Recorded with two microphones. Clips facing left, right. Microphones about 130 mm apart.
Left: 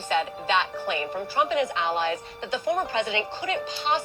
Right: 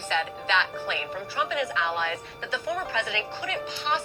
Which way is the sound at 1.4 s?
25° left (ahead or behind).